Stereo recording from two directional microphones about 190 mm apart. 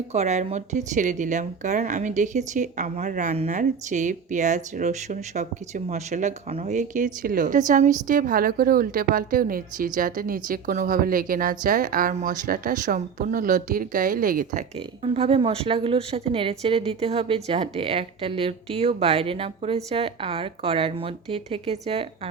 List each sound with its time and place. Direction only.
0.1 s a woman's voice: 35° right (ahead or behind)
15.0 s speech: 30° right (ahead or behind)